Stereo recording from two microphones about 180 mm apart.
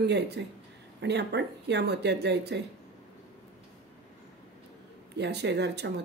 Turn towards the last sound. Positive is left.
turn(degrees=-70)  # may be behind; listen again after turning